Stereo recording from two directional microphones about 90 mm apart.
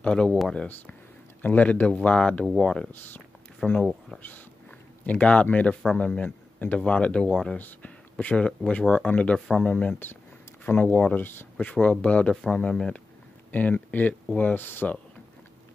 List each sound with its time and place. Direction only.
0.0 s speech: 10° left (ahead or behind)
2.9 s speech: 20° left (ahead or behind)
3.6 s speech: 5° left (ahead or behind)
5.0 s speech: 15° left (ahead or behind)